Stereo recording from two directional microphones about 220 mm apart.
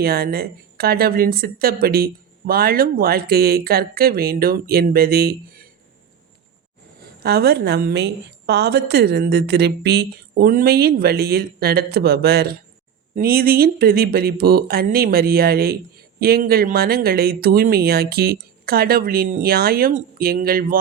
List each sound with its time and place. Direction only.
0.0 s speech: 45° right (ahead or behind)
7.2 s speech: 45° right (ahead or behind)